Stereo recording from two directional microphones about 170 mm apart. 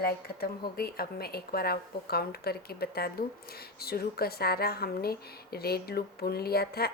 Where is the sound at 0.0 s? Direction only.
65° left (ahead or behind).